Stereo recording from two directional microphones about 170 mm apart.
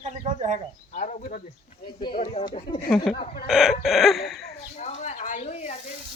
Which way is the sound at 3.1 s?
35° left (ahead or behind).